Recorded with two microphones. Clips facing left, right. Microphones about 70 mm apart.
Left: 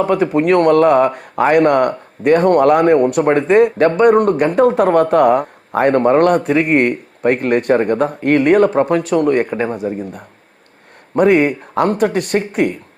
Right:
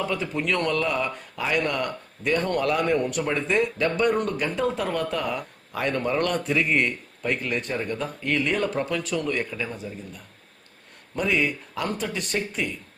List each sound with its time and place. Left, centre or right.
0.0 s speech: left